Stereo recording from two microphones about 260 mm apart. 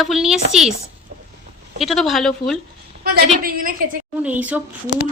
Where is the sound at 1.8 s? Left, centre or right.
Centre.